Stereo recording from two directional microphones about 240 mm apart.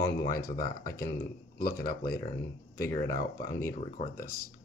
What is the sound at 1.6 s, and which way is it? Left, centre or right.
Speech, left.